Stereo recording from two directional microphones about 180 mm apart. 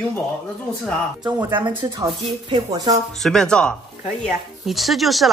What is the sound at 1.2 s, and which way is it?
Speech, 25° right (ahead or behind).